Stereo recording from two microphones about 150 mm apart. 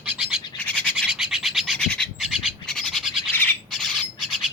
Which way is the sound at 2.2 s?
5° right (ahead or behind).